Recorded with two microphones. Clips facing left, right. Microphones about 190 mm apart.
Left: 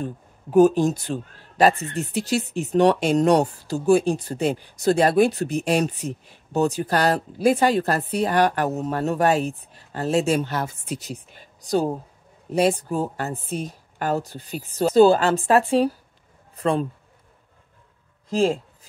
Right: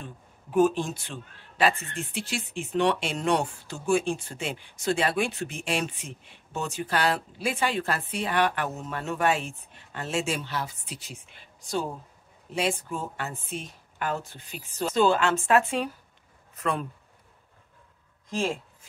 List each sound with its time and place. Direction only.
0.0 s a man's voice: 40° left (ahead or behind)
18.3 s a man's voice: 35° left (ahead or behind)